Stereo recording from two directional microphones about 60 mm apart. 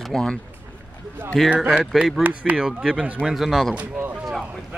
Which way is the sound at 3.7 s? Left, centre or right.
Right.